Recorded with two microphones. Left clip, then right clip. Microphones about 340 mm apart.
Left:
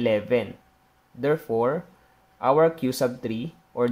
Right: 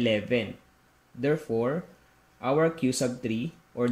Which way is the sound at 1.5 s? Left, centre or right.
Left.